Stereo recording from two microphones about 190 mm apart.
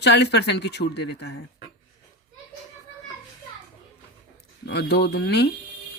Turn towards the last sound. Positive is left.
turn(degrees=60)  # may be behind; listen again after turning